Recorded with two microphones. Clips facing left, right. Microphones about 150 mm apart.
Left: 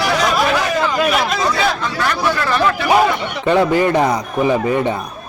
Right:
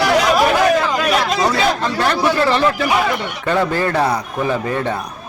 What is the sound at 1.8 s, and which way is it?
Speech, 30° right (ahead or behind).